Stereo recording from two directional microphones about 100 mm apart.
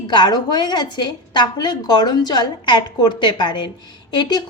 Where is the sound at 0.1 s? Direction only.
45° left (ahead or behind).